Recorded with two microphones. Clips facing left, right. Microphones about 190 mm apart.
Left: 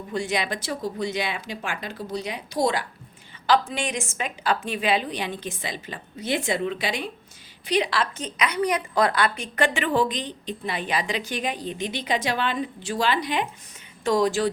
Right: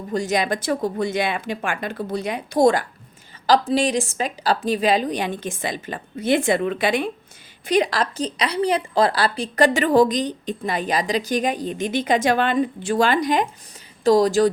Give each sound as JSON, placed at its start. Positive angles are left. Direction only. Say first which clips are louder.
{"t": 0.1, "sound": "a woman's voice", "louder": "right 5 dB", "side_deg": -45}
{"t": 3.4, "sound": "a woman's voice", "louder": "right 5 dB", "side_deg": -35}